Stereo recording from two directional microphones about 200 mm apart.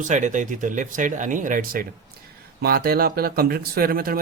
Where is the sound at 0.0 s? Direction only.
40° right (ahead or behind).